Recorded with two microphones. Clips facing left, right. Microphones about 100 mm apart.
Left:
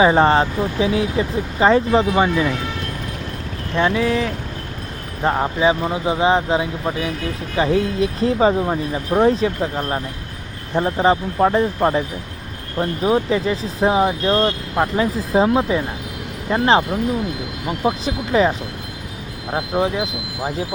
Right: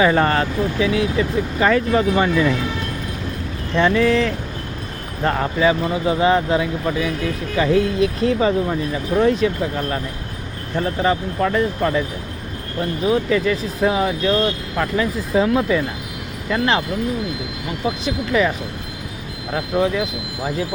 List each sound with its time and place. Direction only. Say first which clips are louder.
0.0 s speech: left 3 dB; 25° left (ahead or behind)
3.8 s speech: right 2 dB; 10° left (ahead or behind); by 18.5 s 30° left (ahead or behind)
19.5 s speech: right 1 dB; 30° left (ahead or behind)